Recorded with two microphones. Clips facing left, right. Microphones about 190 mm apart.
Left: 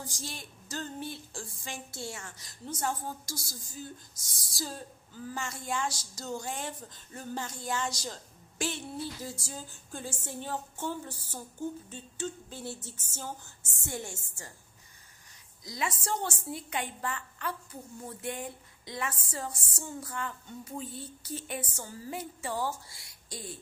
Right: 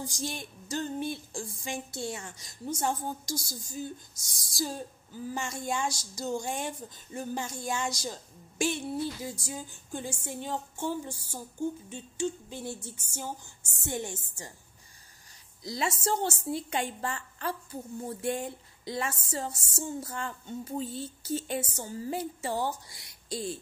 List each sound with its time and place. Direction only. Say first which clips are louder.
0.0 s speech: right 6 dB; 15° right (ahead or behind)
15.6 s speech: right 4 dB; 30° right (ahead or behind)